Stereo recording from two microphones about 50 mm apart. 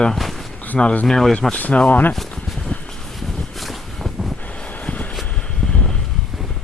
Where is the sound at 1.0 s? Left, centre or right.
Centre.